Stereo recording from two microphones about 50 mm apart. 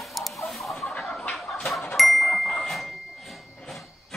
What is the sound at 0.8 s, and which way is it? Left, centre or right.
Chicken, centre.